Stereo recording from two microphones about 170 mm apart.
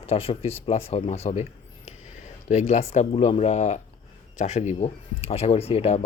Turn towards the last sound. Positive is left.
turn(degrees=35)  # may be behind; listen again after turning